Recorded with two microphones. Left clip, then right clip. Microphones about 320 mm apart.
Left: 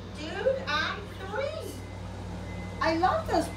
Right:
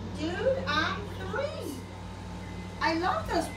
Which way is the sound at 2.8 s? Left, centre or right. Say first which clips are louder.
Left 2 dB; centre.